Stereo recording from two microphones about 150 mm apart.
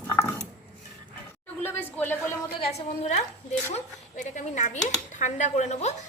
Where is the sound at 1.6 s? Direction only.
15° left (ahead or behind).